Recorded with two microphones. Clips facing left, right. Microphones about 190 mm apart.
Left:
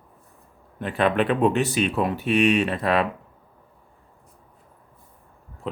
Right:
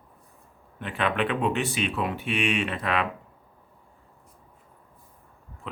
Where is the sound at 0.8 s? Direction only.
40° left (ahead or behind).